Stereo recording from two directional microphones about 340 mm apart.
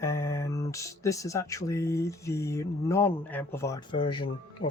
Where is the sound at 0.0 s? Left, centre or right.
Centre.